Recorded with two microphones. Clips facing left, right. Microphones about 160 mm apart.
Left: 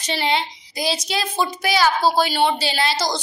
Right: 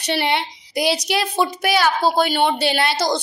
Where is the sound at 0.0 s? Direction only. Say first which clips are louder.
Right 1 dB; 65° right (ahead or behind).